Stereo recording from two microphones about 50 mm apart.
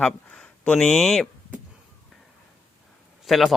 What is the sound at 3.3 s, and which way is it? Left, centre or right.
Speech, centre.